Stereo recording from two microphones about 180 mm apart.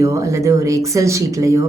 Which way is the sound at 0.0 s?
15° right (ahead or behind).